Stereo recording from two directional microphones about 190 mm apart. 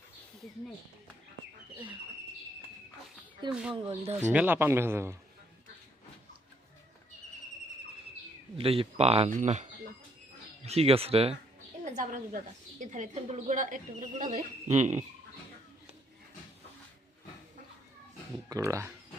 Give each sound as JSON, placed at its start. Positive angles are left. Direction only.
{"t": 3.5, "sound": "speech", "side_deg": -5}
{"t": 3.8, "sound": "speech", "side_deg": -30}
{"t": 4.1, "sound": "speech", "side_deg": -10}
{"t": 8.5, "sound": "speech", "side_deg": -30}
{"t": 10.7, "sound": "speech", "side_deg": -30}
{"t": 12.8, "sound": "speech", "side_deg": -40}
{"t": 18.4, "sound": "speech", "side_deg": -15}